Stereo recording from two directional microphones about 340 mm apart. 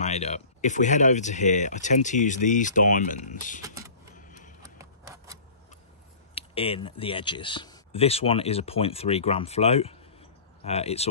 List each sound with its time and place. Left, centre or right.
0.0 s speech: centre
3.6 s vehicle: centre
4.1 s vehicle: left
4.6 s a sound: centre
6.3 s speech: centre